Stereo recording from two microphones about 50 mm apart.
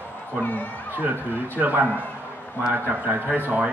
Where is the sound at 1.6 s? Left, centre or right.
Right.